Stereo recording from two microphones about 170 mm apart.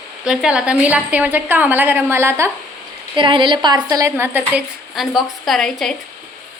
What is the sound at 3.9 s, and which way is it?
Speech, 15° right (ahead or behind).